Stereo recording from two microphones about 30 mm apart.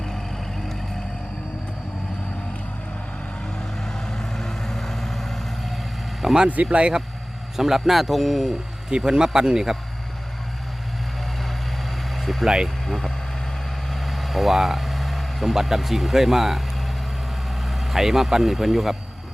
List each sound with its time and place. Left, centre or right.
0.0 s vehicle: centre
3.4 s vehicle: left; by 6.4 s centre
6.7 s speech: right
7.5 s speech: centre
8.9 s speech: right
12.1 s vehicle: centre
13.9 s vehicle: centre
15.6 s speech: centre
17.5 s vehicle: centre
18.5 s speech: centre